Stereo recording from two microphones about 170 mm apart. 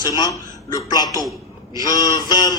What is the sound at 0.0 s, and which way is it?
A man's voice, 25° left (ahead or behind).